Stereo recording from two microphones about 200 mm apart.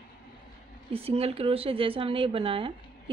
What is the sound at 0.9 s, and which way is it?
Speech, 30° right (ahead or behind).